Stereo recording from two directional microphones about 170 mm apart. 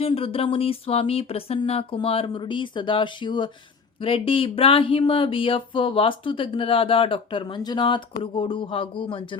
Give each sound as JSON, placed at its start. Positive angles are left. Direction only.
{"t": 0.0, "sound": "speech", "side_deg": 35}